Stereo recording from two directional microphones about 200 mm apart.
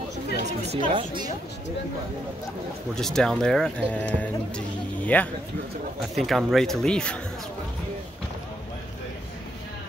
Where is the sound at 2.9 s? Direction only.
5° left (ahead or behind).